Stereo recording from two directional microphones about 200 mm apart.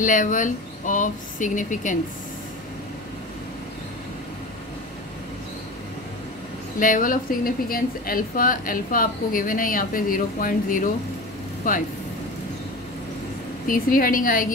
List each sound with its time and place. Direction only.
0.0 s speech: 40° left (ahead or behind)
6.8 s a woman's voice: 45° left (ahead or behind)
13.7 s a woman's voice: 45° left (ahead or behind)